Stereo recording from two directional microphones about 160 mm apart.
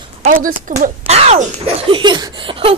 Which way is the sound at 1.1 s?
40° right (ahead or behind).